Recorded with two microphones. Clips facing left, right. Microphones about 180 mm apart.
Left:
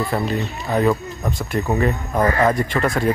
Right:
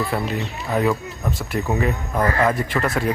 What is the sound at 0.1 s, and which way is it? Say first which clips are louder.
Speech: left 2 dB; centre (ahead or behind).